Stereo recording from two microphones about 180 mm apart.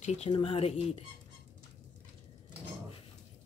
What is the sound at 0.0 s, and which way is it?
Speech, 40° left (ahead or behind).